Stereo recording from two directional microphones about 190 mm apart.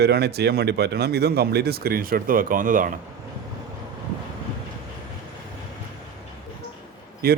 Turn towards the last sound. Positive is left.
turn(degrees=-55)  # may be behind; listen again after turning